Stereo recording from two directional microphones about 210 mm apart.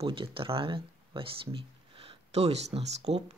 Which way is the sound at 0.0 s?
25° right (ahead or behind).